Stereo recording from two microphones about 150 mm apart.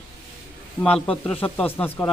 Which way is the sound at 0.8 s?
5° left (ahead or behind).